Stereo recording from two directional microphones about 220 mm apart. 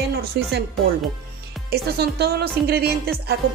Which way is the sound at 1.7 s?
45° right (ahead or behind).